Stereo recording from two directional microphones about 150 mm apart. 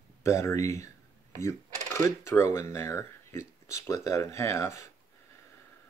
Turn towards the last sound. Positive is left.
turn(degrees=20)  # may be behind; listen again after turning